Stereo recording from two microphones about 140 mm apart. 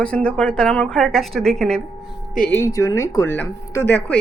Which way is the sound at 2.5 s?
20° left (ahead or behind).